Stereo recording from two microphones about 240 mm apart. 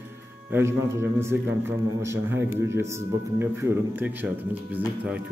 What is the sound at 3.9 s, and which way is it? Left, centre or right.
Speech, centre.